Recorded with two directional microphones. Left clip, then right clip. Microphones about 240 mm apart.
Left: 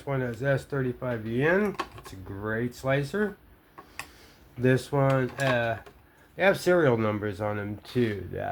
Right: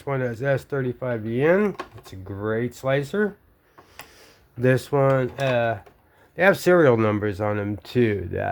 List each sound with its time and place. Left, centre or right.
0.0 s speech: right
4.6 s speech: right